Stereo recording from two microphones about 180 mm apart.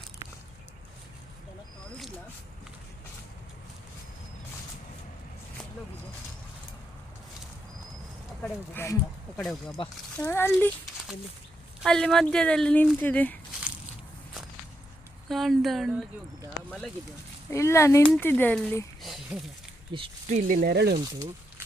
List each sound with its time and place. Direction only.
8.4 s speech: 15° left (ahead or behind)
9.4 s speech: centre (ahead or behind)
10.2 s speech: 15° left (ahead or behind)
11.8 s speech: 5° left (ahead or behind)
15.3 s speech: centre (ahead or behind)
17.5 s speech: 15° left (ahead or behind)
19.0 s a sound: centre (ahead or behind)
19.9 s speech: 25° right (ahead or behind)
20.3 s speech: 55° right (ahead or behind)